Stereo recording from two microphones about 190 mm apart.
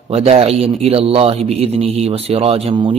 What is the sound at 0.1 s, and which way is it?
A man's voice, 30° right (ahead or behind).